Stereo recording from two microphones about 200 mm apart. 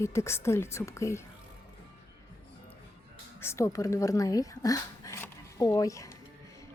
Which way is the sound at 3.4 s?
15° left (ahead or behind).